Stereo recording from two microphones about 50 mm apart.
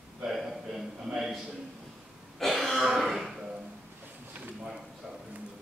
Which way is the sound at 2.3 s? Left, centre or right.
Centre.